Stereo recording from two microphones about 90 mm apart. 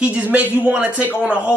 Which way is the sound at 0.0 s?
15° right (ahead or behind).